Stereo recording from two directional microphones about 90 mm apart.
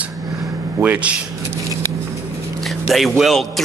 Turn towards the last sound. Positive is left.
turn(degrees=0)  # may be behind; listen again after turning